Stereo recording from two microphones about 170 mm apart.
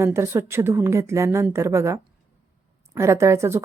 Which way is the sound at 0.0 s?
15° right (ahead or behind).